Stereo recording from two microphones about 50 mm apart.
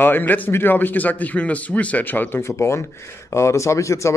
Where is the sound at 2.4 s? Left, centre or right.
Left.